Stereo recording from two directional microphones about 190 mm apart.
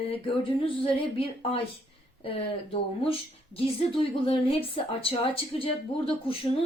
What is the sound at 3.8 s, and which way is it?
A woman's voice, 30° left (ahead or behind).